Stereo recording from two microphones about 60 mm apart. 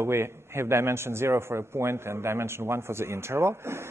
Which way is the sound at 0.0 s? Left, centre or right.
Right.